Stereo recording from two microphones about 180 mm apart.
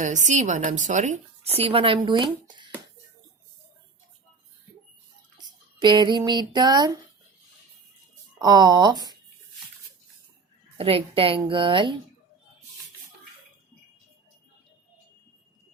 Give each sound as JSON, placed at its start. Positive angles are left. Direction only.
{"t": 0.0, "sound": "a woman's voice", "side_deg": -45}
{"t": 5.4, "sound": "a sound", "side_deg": -25}
{"t": 8.4, "sound": "a woman's voice", "side_deg": -20}
{"t": 10.8, "sound": "a woman's voice", "side_deg": -30}